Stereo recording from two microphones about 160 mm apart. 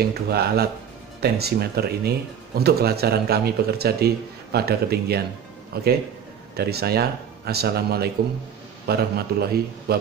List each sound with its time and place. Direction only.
0.0 s speech: 80° right